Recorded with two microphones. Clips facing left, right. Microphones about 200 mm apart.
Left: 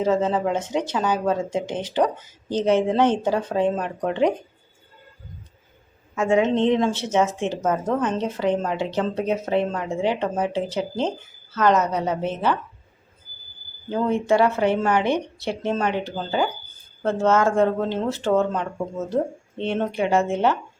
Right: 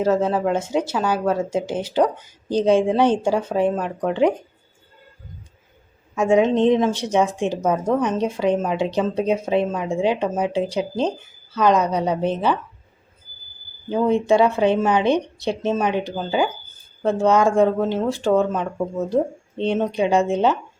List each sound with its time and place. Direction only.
0.0 s a woman's voice: 10° right (ahead or behind)
6.1 s a woman's voice: 15° right (ahead or behind)
13.9 s a woman's voice: 15° right (ahead or behind)